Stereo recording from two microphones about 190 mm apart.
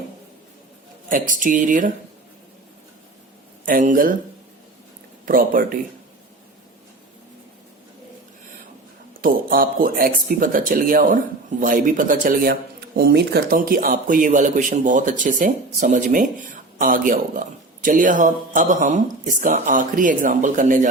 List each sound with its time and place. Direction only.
1.1 s speech: 45° right (ahead or behind)
3.7 s speech: 45° right (ahead or behind)
5.2 s speech: 50° right (ahead or behind)
9.2 s speech: 50° right (ahead or behind)